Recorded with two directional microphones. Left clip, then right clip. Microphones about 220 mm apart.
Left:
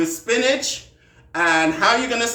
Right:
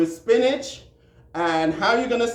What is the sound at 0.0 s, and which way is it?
Speech, 20° left (ahead or behind).